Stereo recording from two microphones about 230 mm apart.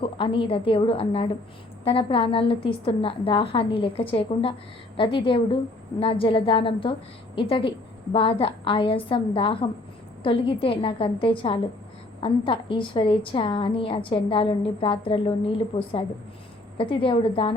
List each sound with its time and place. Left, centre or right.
0.0 s a woman's voice: left